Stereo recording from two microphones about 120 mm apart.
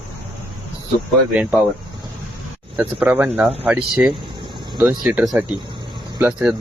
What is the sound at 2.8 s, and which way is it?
Speech, 15° right (ahead or behind).